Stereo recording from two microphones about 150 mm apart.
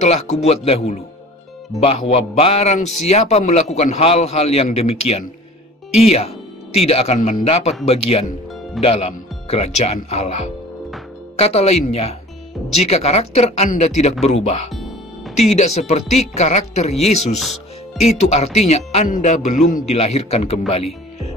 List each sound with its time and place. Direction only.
0.0 s a man's voice: 45° left (ahead or behind)
14.7 s music: centre (ahead or behind)
15.4 s a man's voice: 45° left (ahead or behind)
19.0 s music: 60° left (ahead or behind)
19.7 s a man's voice: 45° left (ahead or behind)